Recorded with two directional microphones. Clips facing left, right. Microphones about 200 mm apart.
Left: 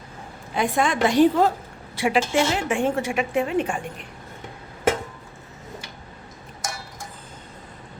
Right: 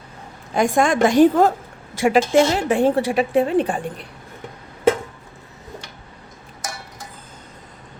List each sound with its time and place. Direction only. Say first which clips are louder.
0.5 s a woman's voice: right 5 dB; 45° right (ahead or behind)